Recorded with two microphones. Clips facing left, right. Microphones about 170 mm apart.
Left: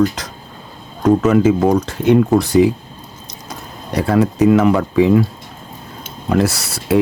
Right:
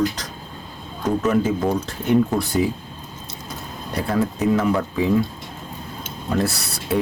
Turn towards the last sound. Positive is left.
turn(degrees=90)